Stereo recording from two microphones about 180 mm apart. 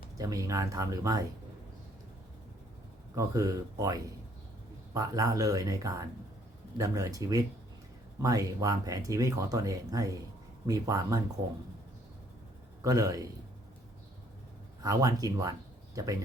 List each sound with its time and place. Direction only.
0.2 s speech: 20° right (ahead or behind)
3.2 s speech: 20° right (ahead or behind)
12.8 s speech: 20° right (ahead or behind)
14.8 s speech: 20° right (ahead or behind)